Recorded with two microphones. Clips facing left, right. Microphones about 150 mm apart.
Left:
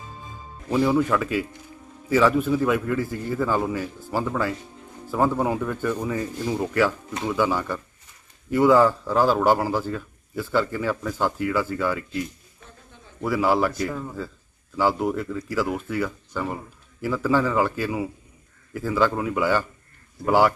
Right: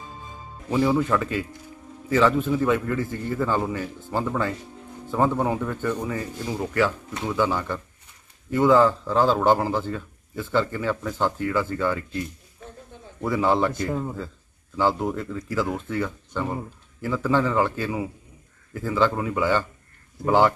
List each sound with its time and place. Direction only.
0.7 s speech: 10° right (ahead or behind)
1.0 s a man's voice: 10° left (ahead or behind)
13.2 s a man's voice: 5° left (ahead or behind)
13.7 s a man's voice: 25° right (ahead or behind)
14.8 s speech: 10° left (ahead or behind)